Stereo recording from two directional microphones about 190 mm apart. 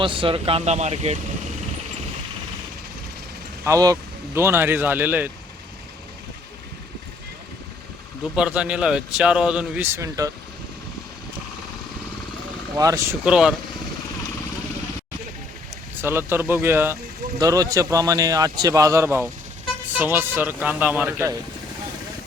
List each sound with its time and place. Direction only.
0.0 s speech: 25° right (ahead or behind)
3.6 s a man's voice: 15° right (ahead or behind)
8.2 s a man's voice: 5° right (ahead or behind)
12.7 s a man's voice: 15° right (ahead or behind)
13.2 s a man's voice: 5° right (ahead or behind)
16.0 s a man's voice: 10° right (ahead or behind)